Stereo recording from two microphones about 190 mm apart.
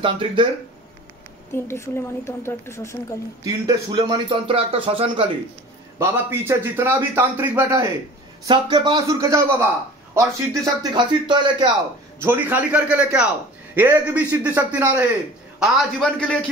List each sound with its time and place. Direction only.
0.0 s speech: 25° right (ahead or behind)
1.5 s a woman's voice: 15° left (ahead or behind)
3.4 s speech: 20° right (ahead or behind)
5.9 s a man's voice: 15° right (ahead or behind)
12.2 s a man's voice: 10° right (ahead or behind)
15.6 s a man's voice: 5° left (ahead or behind)